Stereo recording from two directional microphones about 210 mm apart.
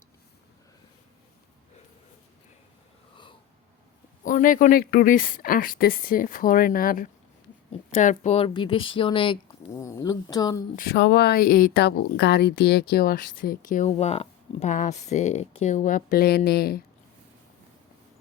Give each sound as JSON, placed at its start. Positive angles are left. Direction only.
{"t": 4.2, "sound": "speech", "side_deg": 40}
{"t": 10.8, "sound": "speech", "side_deg": 50}